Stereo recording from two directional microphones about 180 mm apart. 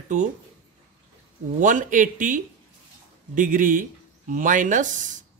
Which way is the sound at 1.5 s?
45° right (ahead or behind).